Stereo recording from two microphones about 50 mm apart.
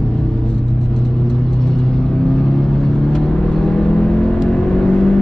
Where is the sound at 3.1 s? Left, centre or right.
Centre.